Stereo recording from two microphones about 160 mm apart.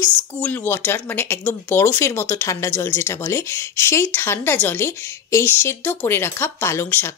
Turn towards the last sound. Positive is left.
turn(degrees=15)  # may be behind; listen again after turning